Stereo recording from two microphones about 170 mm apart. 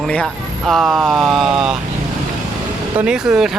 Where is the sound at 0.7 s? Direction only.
Centre (ahead or behind).